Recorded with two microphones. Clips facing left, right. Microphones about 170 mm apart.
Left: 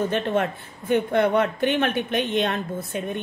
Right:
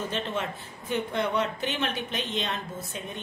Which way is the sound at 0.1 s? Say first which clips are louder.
Left 8 dB; 55° left (ahead or behind).